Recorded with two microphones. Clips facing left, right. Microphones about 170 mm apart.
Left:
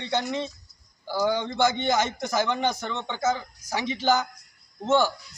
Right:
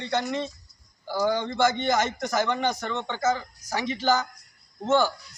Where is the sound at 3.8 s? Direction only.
20° left (ahead or behind).